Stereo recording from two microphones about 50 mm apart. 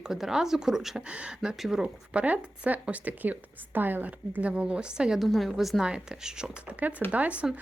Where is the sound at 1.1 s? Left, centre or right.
Right.